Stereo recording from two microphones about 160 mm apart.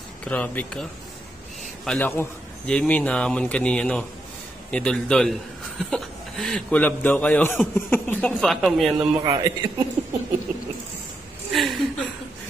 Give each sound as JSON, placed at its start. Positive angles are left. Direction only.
{"t": 0.2, "sound": "a man's voice", "side_deg": 10}
{"t": 1.9, "sound": "a man's voice", "side_deg": 10}
{"t": 9.2, "sound": "a man's voice", "side_deg": -30}
{"t": 11.5, "sound": "a sound", "side_deg": 0}